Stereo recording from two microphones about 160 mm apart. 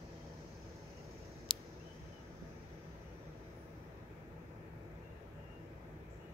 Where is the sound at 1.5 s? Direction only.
35° left (ahead or behind).